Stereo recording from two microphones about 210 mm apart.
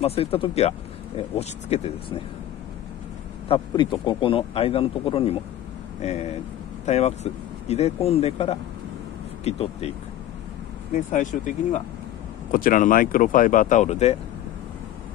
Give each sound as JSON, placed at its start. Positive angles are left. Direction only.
{"t": 0.0, "sound": "speech", "side_deg": 30}
{"t": 3.4, "sound": "speech", "side_deg": 25}
{"t": 11.0, "sound": "speech", "side_deg": 35}